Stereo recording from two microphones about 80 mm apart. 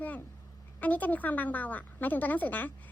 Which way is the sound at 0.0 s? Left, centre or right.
Left.